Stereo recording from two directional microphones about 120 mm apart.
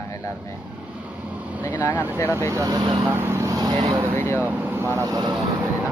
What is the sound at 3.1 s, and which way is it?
Vehicle, 20° right (ahead or behind).